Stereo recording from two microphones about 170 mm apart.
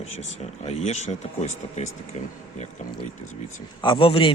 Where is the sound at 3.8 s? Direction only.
30° left (ahead or behind).